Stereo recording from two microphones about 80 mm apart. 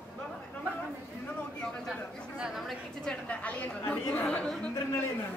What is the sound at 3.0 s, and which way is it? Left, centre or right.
Speech, centre.